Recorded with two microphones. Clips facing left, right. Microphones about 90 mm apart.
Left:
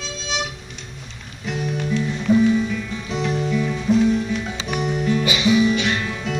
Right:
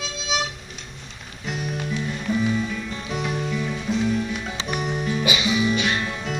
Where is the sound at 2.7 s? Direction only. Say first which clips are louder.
Left 3 dB; 5° right (ahead or behind).